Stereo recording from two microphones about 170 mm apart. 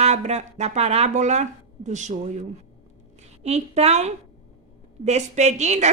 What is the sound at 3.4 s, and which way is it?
A woman's voice, 40° right (ahead or behind).